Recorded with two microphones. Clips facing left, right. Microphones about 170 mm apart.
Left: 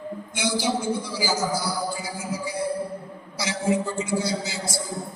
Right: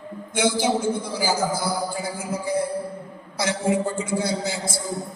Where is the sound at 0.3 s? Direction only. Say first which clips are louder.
Right 4 dB; 55° right (ahead or behind).